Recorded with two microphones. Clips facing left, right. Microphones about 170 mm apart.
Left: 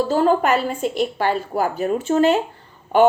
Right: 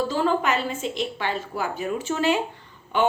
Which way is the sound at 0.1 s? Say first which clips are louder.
Left 6 dB; 45° left (ahead or behind).